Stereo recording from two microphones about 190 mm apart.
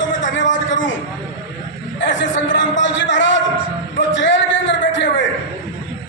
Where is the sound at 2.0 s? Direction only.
75° left (ahead or behind).